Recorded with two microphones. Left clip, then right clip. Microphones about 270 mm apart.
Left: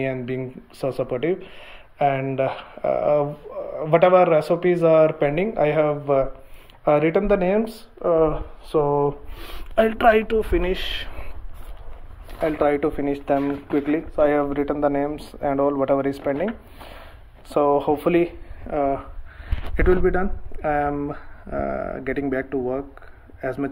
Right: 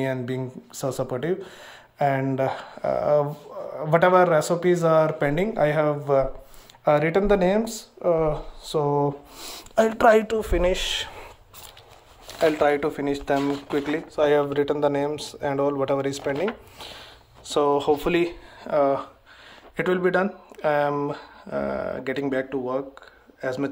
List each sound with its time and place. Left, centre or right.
0.0 s speech: centre
12.4 s speech: centre
17.5 s speech: centre